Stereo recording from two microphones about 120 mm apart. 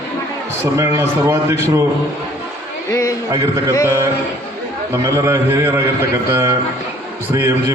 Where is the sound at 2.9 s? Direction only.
25° left (ahead or behind).